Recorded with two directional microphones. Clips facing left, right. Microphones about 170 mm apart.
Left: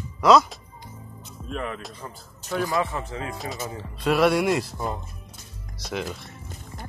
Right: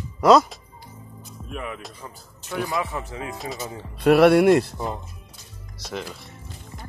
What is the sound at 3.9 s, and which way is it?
Speech, 60° right (ahead or behind).